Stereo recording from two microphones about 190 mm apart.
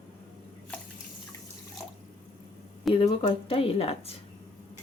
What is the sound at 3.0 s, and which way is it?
Speech, 30° left (ahead or behind).